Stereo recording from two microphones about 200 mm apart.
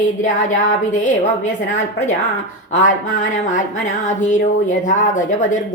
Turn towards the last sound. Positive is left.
turn(degrees=40)  # may be behind; listen again after turning